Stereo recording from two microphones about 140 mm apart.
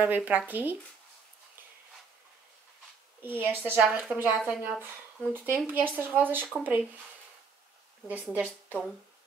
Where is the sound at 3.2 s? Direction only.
15° right (ahead or behind).